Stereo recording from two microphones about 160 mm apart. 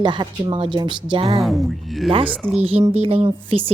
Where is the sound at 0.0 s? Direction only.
30° right (ahead or behind).